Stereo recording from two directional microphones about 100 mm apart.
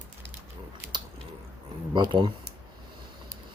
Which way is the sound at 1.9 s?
50° right (ahead or behind).